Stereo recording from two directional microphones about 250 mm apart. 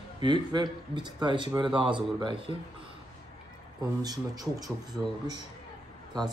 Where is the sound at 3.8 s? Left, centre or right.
Centre.